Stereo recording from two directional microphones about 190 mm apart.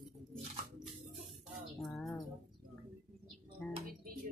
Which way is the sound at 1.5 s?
Centre (ahead or behind).